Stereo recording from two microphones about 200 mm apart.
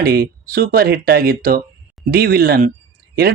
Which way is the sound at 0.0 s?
50° right (ahead or behind).